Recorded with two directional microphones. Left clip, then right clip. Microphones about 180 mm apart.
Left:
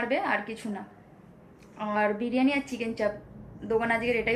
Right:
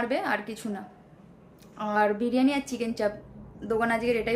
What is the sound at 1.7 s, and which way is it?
A woman's voice, 20° right (ahead or behind).